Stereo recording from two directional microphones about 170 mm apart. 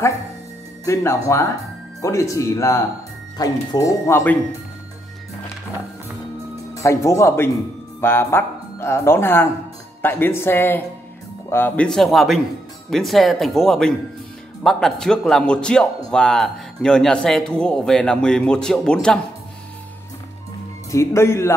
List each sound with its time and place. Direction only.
0.8 s speech: 15° left (ahead or behind)
6.7 s speech: 15° left (ahead or behind)
20.9 s speech: 15° left (ahead or behind)